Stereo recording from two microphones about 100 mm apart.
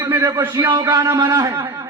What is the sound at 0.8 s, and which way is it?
Speech, 35° right (ahead or behind).